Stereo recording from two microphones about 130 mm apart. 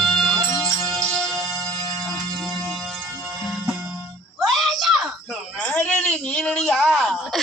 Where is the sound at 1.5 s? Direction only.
20° left (ahead or behind).